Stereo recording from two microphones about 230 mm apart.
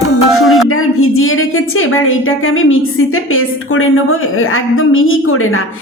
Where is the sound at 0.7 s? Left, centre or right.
Left.